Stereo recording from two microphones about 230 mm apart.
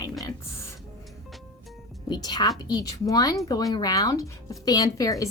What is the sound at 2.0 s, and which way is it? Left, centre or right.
A woman's voice, centre.